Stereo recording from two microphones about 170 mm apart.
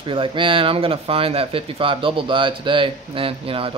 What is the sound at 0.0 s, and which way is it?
Speech, 30° right (ahead or behind).